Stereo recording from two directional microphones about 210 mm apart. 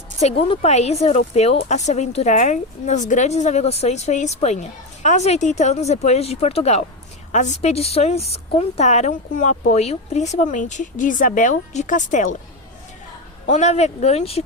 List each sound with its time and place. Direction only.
0.2 s speech: 30° left (ahead or behind)
13.5 s speech: 30° left (ahead or behind)